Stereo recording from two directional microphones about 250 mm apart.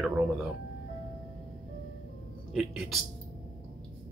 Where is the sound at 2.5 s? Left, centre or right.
Centre.